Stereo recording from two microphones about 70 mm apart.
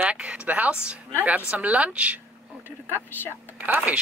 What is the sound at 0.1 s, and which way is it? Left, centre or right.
Speech, centre.